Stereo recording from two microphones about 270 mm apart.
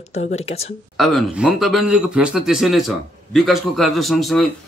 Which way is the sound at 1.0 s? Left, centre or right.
Centre.